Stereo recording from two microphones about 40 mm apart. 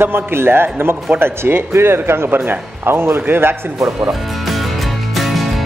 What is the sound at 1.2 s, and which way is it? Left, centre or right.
Speech, right.